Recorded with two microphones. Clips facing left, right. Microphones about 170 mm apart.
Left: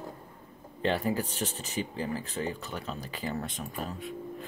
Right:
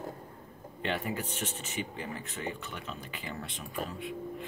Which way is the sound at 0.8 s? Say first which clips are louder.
Left 5 dB; 35° left (ahead or behind).